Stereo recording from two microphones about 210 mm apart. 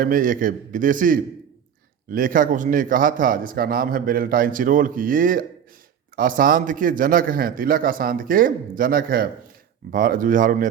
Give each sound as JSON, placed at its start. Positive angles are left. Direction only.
{"t": 0.0, "sound": "speech", "side_deg": -40}